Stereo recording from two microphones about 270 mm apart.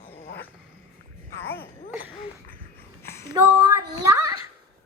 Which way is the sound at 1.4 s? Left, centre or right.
Centre.